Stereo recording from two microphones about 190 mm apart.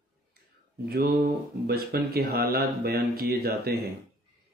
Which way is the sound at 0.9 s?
50° right (ahead or behind).